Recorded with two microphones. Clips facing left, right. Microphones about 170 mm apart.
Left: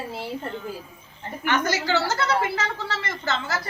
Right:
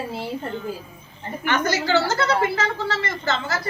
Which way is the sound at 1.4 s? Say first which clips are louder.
Right 1 dB; 10° left (ahead or behind).